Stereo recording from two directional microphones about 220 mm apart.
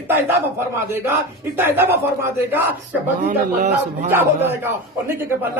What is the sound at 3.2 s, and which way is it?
Speech, 35° right (ahead or behind).